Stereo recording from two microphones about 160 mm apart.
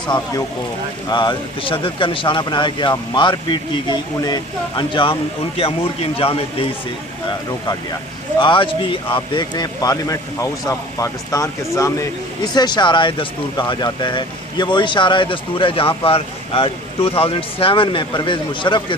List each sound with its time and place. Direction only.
1.1 s speech: 30° left (ahead or behind)
8.4 s speech: 30° left (ahead or behind)